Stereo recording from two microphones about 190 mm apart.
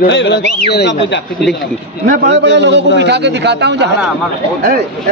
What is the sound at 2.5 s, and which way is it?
A man's voice, 65° right (ahead or behind).